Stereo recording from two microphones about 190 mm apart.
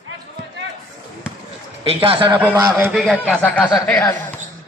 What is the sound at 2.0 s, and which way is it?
Speech, 25° right (ahead or behind).